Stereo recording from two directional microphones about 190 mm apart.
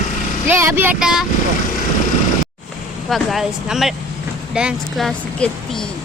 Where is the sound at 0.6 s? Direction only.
10° right (ahead or behind).